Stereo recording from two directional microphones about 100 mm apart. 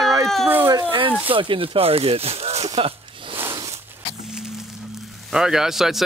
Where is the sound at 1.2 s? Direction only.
60° right (ahead or behind); by 2.9 s 90° right.